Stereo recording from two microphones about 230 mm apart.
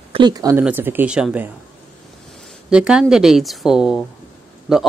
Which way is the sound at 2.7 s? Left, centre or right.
Centre.